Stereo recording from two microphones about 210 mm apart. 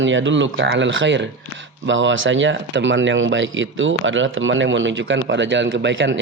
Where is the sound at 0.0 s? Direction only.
65° right (ahead or behind).